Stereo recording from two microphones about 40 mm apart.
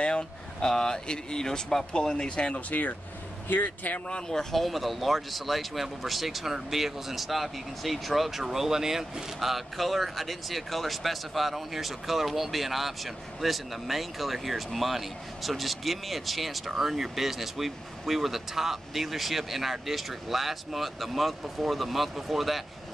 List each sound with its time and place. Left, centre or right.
0.0 s speech: left
3.4 s speech: left
4.3 s speech: centre
4.6 s speech: centre